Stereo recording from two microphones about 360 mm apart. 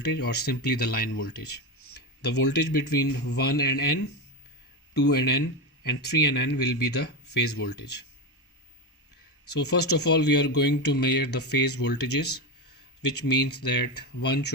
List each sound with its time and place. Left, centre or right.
0.0 s speech: left
4.9 s speech: left
9.5 s speech: left